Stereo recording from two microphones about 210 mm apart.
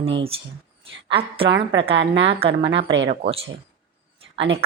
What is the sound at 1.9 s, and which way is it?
Speech, 60° right (ahead or behind).